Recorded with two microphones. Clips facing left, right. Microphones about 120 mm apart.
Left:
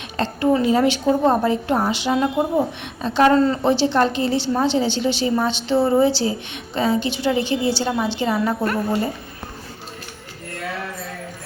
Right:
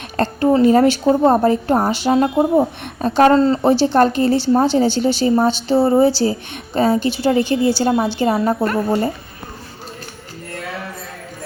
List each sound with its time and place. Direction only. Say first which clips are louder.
0.2 s a woman's voice: right 4 dB; 45° right (ahead or behind)